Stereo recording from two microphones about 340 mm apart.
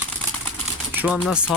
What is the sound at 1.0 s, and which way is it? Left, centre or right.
Speech, centre.